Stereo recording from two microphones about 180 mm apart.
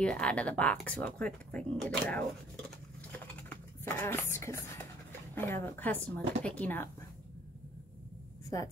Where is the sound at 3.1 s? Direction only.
10° left (ahead or behind).